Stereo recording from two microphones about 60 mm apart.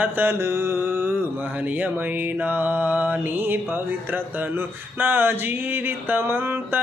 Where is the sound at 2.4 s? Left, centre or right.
Right.